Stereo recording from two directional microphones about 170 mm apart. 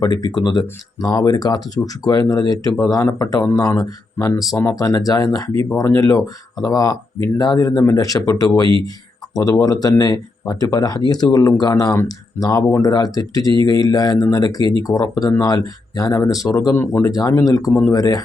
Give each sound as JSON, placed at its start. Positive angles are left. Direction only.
{"t": 0.0, "sound": "speech", "side_deg": 25}